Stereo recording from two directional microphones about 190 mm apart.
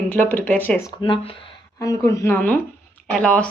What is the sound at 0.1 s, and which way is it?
Speech, 10° left (ahead or behind).